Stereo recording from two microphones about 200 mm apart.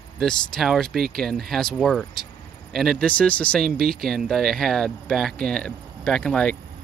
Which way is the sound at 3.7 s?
50° right (ahead or behind).